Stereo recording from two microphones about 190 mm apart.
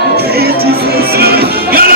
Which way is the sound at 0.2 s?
55° right (ahead or behind).